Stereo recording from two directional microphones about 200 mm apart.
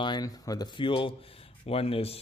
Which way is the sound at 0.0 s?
20° left (ahead or behind).